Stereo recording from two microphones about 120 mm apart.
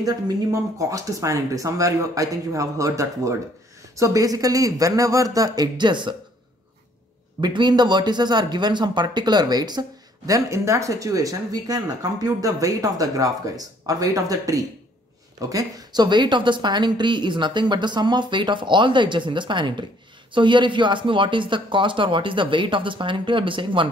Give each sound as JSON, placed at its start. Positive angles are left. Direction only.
{"t": 0.0, "sound": "speech", "side_deg": -25}
{"t": 7.3, "sound": "speech", "side_deg": -35}